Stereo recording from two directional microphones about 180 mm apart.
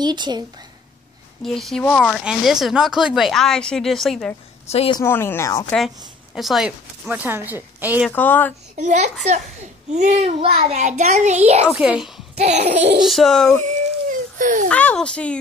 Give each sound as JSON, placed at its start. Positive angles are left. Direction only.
{"t": 0.0, "sound": "a woman's voice", "side_deg": -25}
{"t": 1.4, "sound": "speech", "side_deg": 0}
{"t": 4.6, "sound": "a woman's voice", "side_deg": 35}
{"t": 4.9, "sound": "speech", "side_deg": 15}
{"t": 6.3, "sound": "speech", "side_deg": 0}
{"t": 8.1, "sound": "speech", "side_deg": 10}
{"t": 8.7, "sound": "a child's voice", "side_deg": -40}
{"t": 11.6, "sound": "speech", "side_deg": -5}
{"t": 12.4, "sound": "a child's voice", "side_deg": -35}
{"t": 13.0, "sound": "speech", "side_deg": 0}
{"t": 14.4, "sound": "a child's voice", "side_deg": -45}
{"t": 14.7, "sound": "speech", "side_deg": 5}